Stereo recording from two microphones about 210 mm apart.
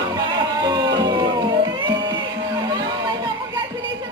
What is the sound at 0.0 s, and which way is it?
Music, 20° right (ahead or behind).